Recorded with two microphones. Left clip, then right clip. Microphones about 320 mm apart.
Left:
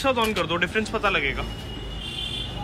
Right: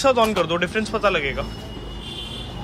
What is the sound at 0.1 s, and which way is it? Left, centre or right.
Speech, centre.